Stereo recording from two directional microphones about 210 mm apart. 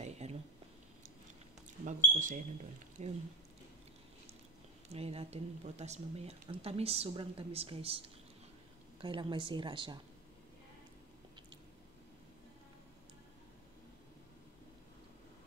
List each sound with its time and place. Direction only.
0.0 s a sound: 30° right (ahead or behind)
1.9 s speech: 35° right (ahead or behind)
4.9 s speech: 30° right (ahead or behind)
9.0 s speech: 25° right (ahead or behind)